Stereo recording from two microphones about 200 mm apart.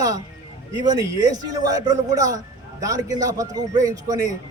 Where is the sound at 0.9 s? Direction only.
20° right (ahead or behind).